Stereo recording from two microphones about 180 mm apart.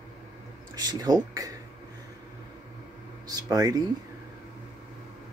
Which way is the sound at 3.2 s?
20° right (ahead or behind).